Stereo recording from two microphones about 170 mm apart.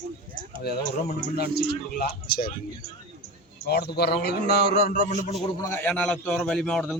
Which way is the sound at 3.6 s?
70° left (ahead or behind).